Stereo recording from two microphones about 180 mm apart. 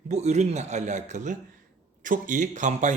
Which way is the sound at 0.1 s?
40° right (ahead or behind).